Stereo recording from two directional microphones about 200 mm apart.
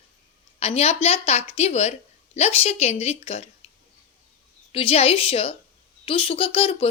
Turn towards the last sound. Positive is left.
turn(degrees=30)  # may be behind; listen again after turning